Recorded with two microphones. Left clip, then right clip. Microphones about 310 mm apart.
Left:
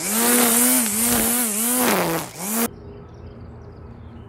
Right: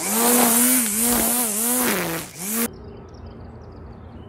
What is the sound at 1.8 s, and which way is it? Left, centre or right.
Fart, centre.